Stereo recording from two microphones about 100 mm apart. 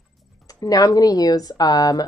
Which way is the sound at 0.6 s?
40° left (ahead or behind).